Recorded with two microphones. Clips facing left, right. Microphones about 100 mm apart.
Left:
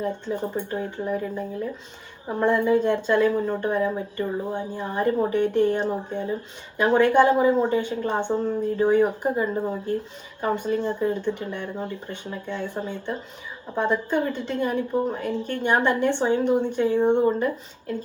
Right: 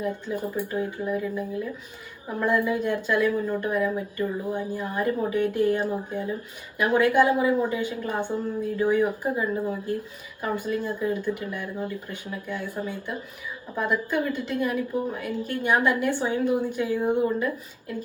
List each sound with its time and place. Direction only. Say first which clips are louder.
0.0 s speech: left 2 dB; 25° left (ahead or behind)